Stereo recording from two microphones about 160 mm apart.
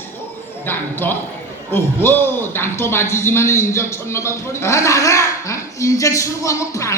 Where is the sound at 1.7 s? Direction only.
15° left (ahead or behind).